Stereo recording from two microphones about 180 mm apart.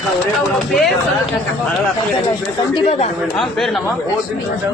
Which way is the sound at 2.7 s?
35° left (ahead or behind).